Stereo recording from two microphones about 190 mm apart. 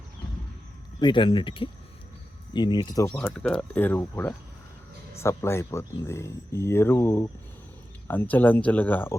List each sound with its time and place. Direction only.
0.9 s speech: 25° left (ahead or behind)
3.1 s speech: 5° left (ahead or behind)